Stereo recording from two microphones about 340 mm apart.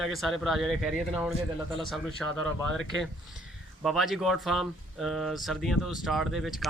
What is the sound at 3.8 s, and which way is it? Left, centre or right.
Speech, centre.